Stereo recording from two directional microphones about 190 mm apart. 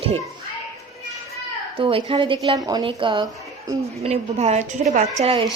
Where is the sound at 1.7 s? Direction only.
30° right (ahead or behind).